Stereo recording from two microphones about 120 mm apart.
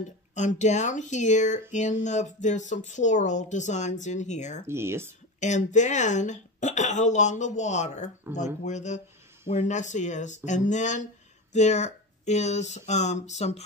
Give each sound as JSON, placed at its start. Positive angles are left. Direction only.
{"t": 0.3, "sound": "speech", "side_deg": 80}
{"t": 4.6, "sound": "speech", "side_deg": -20}
{"t": 5.4, "sound": "speech", "side_deg": 85}
{"t": 11.5, "sound": "speech", "side_deg": 75}